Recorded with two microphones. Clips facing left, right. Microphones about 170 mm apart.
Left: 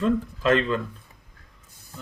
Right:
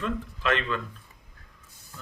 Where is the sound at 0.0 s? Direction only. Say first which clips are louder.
Left 7 dB; 35° left (ahead or behind).